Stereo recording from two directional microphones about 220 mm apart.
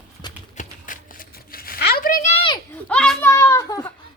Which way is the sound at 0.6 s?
35° left (ahead or behind).